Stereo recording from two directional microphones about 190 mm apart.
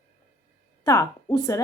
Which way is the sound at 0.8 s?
20° left (ahead or behind).